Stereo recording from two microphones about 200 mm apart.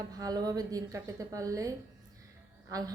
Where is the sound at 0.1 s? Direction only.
20° right (ahead or behind).